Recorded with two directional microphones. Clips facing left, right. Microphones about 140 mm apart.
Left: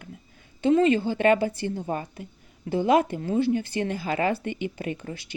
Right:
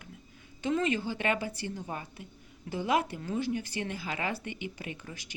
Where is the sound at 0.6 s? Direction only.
30° left (ahead or behind).